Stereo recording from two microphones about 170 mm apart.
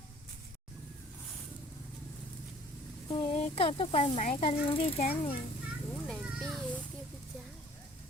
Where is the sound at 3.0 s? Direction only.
35° left (ahead or behind).